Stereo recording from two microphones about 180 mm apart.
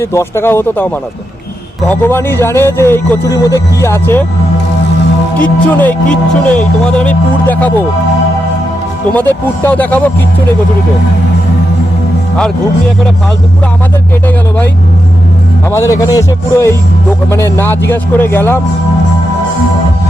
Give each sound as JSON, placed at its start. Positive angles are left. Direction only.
{"t": 0.0, "sound": "speech", "side_deg": 15}
{"t": 1.9, "sound": "speech", "side_deg": 10}
{"t": 5.4, "sound": "speech", "side_deg": 10}
{"t": 9.1, "sound": "speech", "side_deg": 10}
{"t": 15.7, "sound": "speech", "side_deg": 15}